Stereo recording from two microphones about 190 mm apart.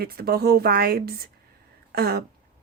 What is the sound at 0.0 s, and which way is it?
Speech, 55° right (ahead or behind).